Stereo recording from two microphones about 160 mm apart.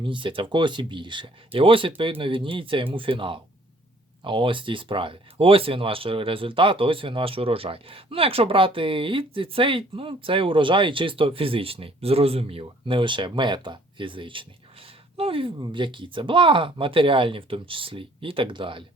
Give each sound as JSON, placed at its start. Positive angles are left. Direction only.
{"t": 0.0, "sound": "speech", "side_deg": -30}